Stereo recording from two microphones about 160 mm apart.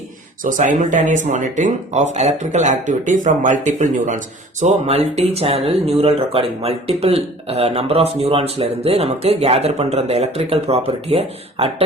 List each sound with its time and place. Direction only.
0.4 s speech: 55° right (ahead or behind); by 11.7 s 40° right (ahead or behind)